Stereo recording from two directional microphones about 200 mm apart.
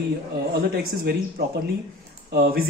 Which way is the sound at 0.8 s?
55° right (ahead or behind).